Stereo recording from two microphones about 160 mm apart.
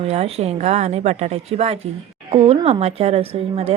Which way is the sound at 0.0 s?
40° right (ahead or behind).